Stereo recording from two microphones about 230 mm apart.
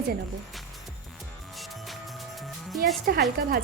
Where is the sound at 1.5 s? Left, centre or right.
Centre.